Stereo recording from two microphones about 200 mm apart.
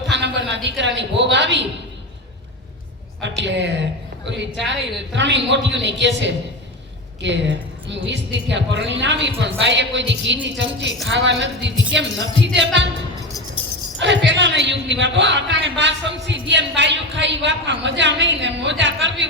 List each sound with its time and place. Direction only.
0.1 s a sound: 65° right (ahead or behind)
3.2 s a man's voice: 60° right (ahead or behind)
14.0 s a man's voice: 60° right (ahead or behind)